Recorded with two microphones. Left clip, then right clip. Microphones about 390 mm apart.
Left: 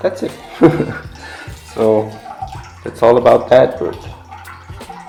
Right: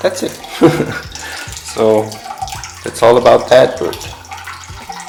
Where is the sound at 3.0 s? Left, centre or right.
Centre.